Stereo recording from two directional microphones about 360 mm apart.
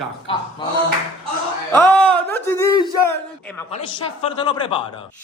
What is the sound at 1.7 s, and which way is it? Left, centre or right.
A man's voice, centre.